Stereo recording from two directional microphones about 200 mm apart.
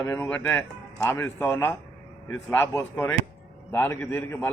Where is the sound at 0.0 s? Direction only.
10° left (ahead or behind).